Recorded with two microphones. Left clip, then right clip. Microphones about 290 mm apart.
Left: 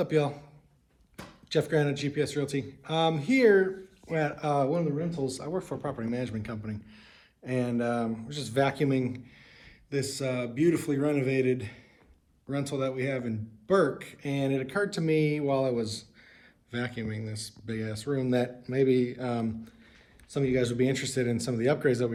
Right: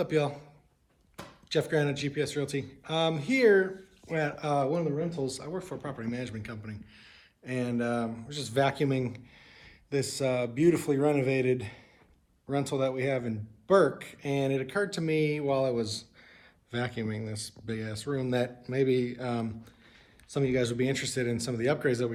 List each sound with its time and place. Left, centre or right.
0.0 s speech: centre